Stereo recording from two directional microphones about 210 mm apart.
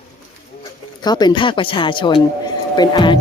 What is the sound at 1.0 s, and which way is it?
Speech, 20° left (ahead or behind).